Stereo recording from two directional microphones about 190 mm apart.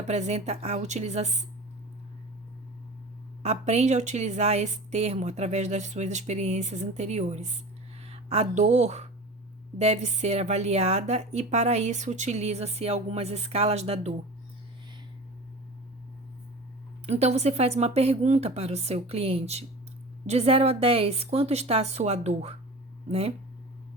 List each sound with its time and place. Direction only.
0.0 s a woman's voice: 35° right (ahead or behind)
3.4 s a woman's voice: 35° right (ahead or behind)
17.1 s a woman's voice: 35° right (ahead or behind)